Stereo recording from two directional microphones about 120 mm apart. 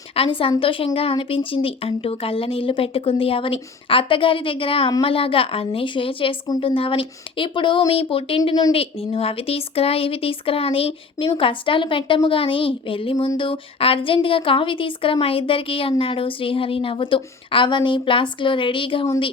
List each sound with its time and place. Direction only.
0.1 s a woman's voice: 50° left (ahead or behind)